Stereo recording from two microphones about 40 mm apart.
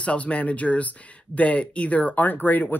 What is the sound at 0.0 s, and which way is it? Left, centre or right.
Speech, left.